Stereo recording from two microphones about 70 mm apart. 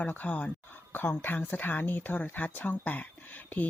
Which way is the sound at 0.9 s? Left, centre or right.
Left.